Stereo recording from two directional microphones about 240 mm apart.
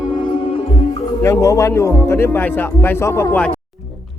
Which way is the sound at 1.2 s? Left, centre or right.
Centre.